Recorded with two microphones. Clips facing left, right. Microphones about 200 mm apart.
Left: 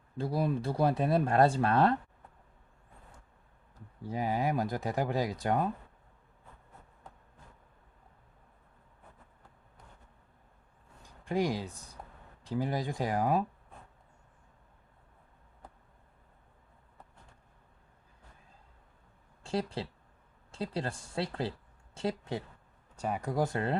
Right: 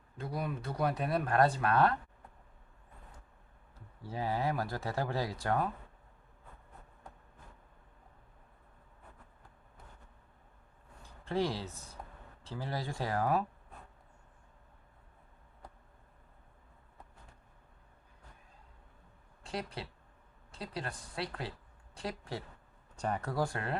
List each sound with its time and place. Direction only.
0.2 s speech: 30° left (ahead or behind)
3.8 s speech: 15° left (ahead or behind)
11.0 s speech: 15° left (ahead or behind)
19.5 s speech: 30° left (ahead or behind)
23.0 s speech: 10° left (ahead or behind)